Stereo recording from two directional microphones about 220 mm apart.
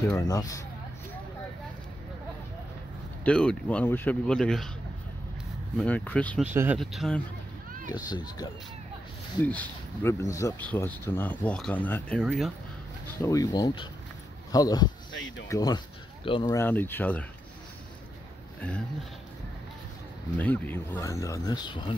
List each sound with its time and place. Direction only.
0.1 s speech: 15° left (ahead or behind)
3.3 s speech: 5° left (ahead or behind)
5.8 s speech: 5° left (ahead or behind)
6.5 s speech: 10° right (ahead or behind)
6.8 s speech: centre (ahead or behind)
8.1 s speech: 20° left (ahead or behind)
9.4 s speech: 5° left (ahead or behind)
13.2 s speech: 15° left (ahead or behind)
20.3 s speech: 10° left (ahead or behind)